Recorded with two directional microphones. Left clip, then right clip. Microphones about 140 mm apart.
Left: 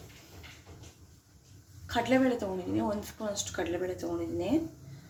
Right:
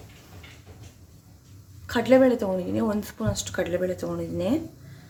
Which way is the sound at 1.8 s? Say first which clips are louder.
Right 9 dB; 50° right (ahead or behind).